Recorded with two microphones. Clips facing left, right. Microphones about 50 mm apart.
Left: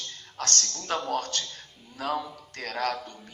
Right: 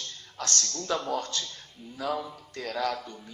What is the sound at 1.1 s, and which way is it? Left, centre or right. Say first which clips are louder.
A man's voice: left 1 dB; left.